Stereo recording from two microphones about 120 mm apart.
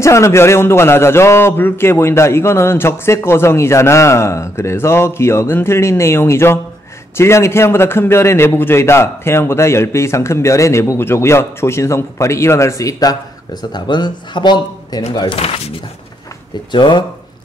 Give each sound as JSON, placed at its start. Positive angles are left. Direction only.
{"t": 0.0, "sound": "a man's voice", "side_deg": 25}
{"t": 15.3, "sound": "speech", "side_deg": 55}
{"t": 16.7, "sound": "speech", "side_deg": 40}